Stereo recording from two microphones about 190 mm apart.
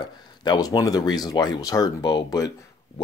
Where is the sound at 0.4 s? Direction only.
20° left (ahead or behind).